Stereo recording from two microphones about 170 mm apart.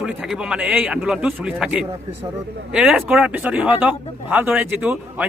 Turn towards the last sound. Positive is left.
turn(degrees=-10)  # may be behind; listen again after turning